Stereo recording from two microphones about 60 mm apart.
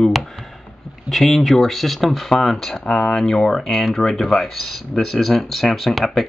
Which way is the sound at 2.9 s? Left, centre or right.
Centre.